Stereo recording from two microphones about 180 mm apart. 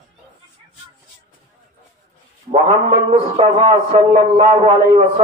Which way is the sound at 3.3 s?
35° right (ahead or behind).